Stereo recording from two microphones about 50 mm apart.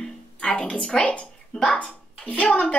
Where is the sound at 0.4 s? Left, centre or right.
Centre.